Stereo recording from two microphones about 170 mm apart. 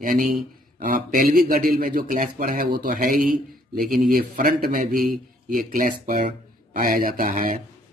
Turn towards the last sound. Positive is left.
turn(degrees=-50)  # may be behind; listen again after turning